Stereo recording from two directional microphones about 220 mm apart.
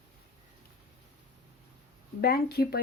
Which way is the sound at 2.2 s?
45° left (ahead or behind).